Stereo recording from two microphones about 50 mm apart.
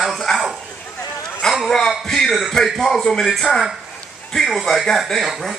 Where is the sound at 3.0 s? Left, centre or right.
Centre.